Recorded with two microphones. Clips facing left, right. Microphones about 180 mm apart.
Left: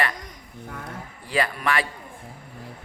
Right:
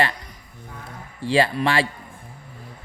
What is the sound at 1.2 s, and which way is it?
Speech, 30° right (ahead or behind).